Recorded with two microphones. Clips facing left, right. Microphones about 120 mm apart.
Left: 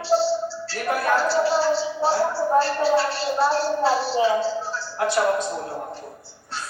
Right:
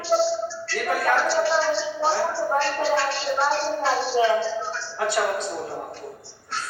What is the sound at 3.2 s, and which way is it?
A woman's voice, 40° left (ahead or behind).